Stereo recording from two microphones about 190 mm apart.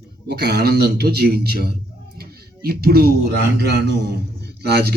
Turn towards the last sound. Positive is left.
turn(degrees=-60)  # may be behind; listen again after turning